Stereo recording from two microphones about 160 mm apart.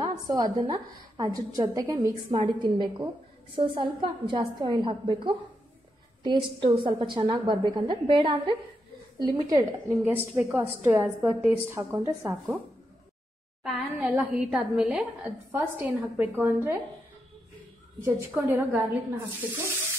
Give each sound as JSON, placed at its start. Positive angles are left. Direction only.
{"t": 0.0, "sound": "a woman's voice", "side_deg": -25}
{"t": 10.0, "sound": "a woman's voice", "side_deg": -10}
{"t": 13.7, "sound": "a woman's voice", "side_deg": 0}
{"t": 18.0, "sound": "a woman's voice", "side_deg": -10}